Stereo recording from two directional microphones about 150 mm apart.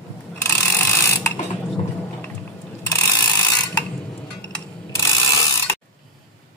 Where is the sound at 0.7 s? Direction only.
20° left (ahead or behind).